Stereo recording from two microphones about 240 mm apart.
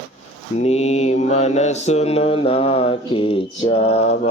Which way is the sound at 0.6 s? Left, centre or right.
Left.